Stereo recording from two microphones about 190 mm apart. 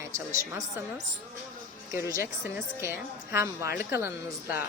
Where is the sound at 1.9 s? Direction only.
15° right (ahead or behind).